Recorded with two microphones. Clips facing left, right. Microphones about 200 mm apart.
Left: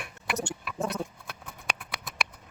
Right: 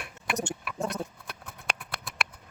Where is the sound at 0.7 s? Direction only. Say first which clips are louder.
Left 1 dB; centre (ahead or behind).